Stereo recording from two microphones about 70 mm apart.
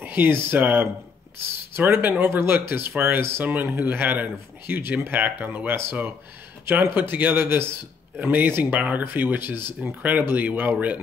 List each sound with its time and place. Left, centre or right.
0.0 s speech: right
8.6 s speech: centre